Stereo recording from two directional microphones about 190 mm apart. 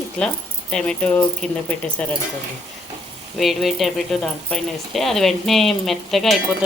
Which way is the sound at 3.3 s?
Centre (ahead or behind).